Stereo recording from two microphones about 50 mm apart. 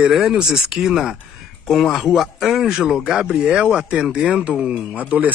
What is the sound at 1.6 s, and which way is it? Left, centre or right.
Speech, centre.